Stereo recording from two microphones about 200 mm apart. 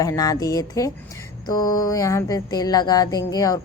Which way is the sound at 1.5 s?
20° left (ahead or behind).